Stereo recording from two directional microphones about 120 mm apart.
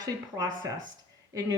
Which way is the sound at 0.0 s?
35° right (ahead or behind).